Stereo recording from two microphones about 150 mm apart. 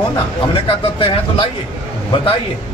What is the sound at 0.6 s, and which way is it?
A man's voice, 35° left (ahead or behind).